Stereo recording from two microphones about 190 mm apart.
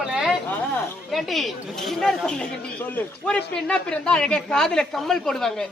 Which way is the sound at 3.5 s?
5° left (ahead or behind).